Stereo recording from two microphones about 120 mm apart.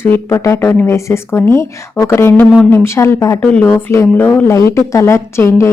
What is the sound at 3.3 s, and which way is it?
A woman's voice, 15° left (ahead or behind).